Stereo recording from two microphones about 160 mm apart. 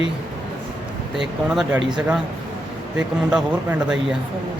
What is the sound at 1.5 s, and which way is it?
Speech, centre (ahead or behind).